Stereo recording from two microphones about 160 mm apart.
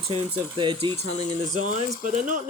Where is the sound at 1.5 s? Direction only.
50° right (ahead or behind).